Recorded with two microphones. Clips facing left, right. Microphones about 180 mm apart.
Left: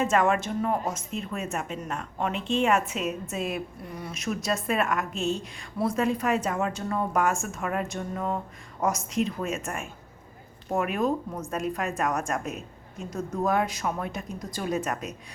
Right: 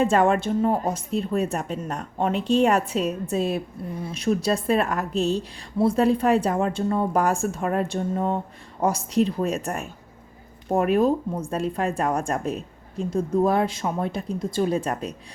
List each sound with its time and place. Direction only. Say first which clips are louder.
0.0 s a woman's voice: right 4 dB; 30° right (ahead or behind)